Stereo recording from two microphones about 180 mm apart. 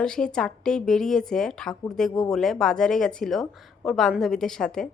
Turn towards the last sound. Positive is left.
turn(degrees=5)  # may be behind; listen again after turning